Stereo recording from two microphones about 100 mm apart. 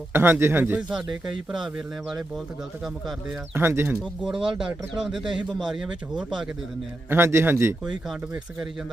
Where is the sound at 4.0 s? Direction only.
5° right (ahead or behind).